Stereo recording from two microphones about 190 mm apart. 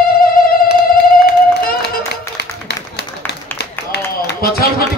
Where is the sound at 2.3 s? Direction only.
60° left (ahead or behind).